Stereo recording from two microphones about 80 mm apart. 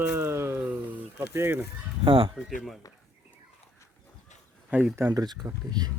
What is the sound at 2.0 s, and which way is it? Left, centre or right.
Speech, right.